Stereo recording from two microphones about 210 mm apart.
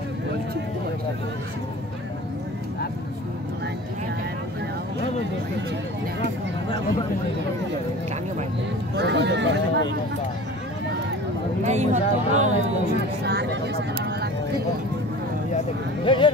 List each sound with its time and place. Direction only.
8.9 s speech: 55° right (ahead or behind)
11.6 s speech: 35° right (ahead or behind)
13.2 s vehicle: 50° right (ahead or behind)
16.1 s a sound: 25° left (ahead or behind)